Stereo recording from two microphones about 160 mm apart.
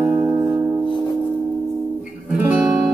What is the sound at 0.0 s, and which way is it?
Music, 20° right (ahead or behind).